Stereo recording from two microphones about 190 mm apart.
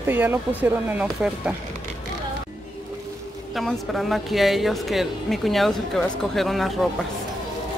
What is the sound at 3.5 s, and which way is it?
Speech, centre (ahead or behind).